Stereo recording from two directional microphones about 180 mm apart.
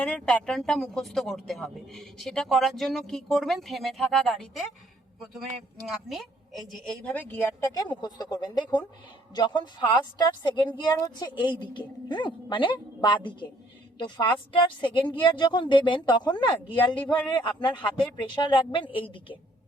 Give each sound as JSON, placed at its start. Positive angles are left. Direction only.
{"t": 0.0, "sound": "speech", "side_deg": 5}
{"t": 5.8, "sound": "a woman's voice", "side_deg": 0}